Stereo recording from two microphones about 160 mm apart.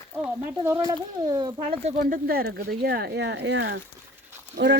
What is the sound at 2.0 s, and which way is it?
Speech, 65° right (ahead or behind).